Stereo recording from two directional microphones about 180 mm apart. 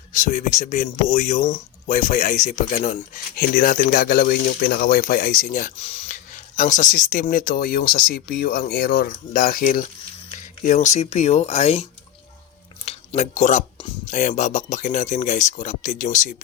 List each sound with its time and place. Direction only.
0.1 s speech: 45° left (ahead or behind)
5.7 s speech: 35° left (ahead or behind)